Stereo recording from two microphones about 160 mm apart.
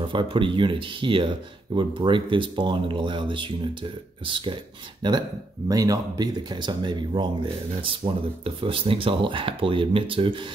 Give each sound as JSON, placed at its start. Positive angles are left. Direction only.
{"t": 0.1, "sound": "speech", "side_deg": -30}